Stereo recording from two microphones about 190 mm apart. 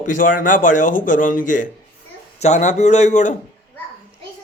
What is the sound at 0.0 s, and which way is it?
A man's voice, 45° left (ahead or behind).